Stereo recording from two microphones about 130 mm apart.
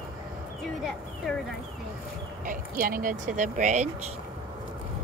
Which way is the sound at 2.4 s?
90° right.